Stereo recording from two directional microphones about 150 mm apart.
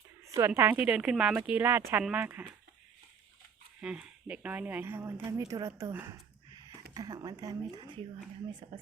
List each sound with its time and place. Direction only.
0.3 s speech: 20° right (ahead or behind)
3.8 s speech: 5° right (ahead or behind); by 8.8 s 35° right (ahead or behind)